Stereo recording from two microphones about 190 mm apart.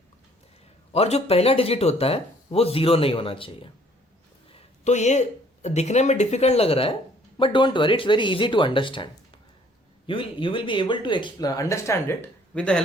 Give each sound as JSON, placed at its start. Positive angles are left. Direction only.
{"t": 0.9, "sound": "speech", "side_deg": 35}
{"t": 10.1, "sound": "speech", "side_deg": 25}